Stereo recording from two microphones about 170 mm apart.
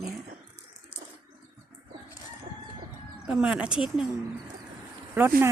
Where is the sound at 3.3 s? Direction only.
5° right (ahead or behind).